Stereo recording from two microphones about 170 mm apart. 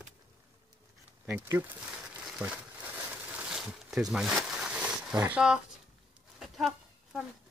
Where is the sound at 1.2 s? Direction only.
10° right (ahead or behind).